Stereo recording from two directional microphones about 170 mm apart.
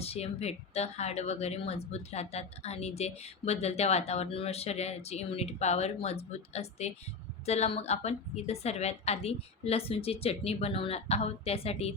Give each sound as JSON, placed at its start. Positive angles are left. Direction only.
{"t": 0.0, "sound": "a woman's voice", "side_deg": 35}